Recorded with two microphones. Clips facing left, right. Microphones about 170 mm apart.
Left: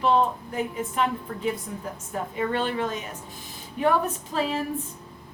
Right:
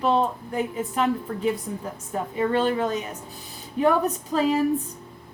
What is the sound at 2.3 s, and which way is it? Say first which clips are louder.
A woman's voice: right 5 dB; 40° right (ahead or behind).